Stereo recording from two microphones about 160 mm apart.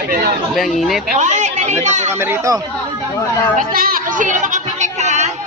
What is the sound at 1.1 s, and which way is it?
Speech, 50° right (ahead or behind).